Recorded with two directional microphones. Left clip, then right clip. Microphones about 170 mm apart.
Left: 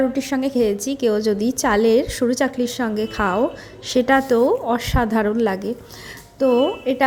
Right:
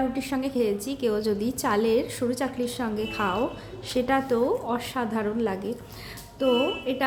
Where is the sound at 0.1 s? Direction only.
30° left (ahead or behind).